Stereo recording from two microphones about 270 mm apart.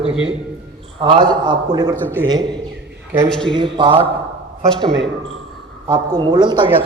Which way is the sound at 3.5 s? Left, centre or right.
Centre.